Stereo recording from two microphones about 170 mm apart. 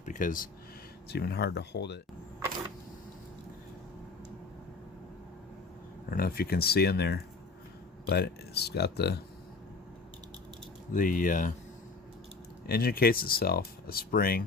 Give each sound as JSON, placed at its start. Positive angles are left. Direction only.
{"t": 0.0, "sound": "a sound", "side_deg": 50}
{"t": 1.1, "sound": "speech", "side_deg": 70}
{"t": 6.1, "sound": "speech", "side_deg": 60}
{"t": 10.9, "sound": "speech", "side_deg": 55}
{"t": 12.6, "sound": "speech", "side_deg": 60}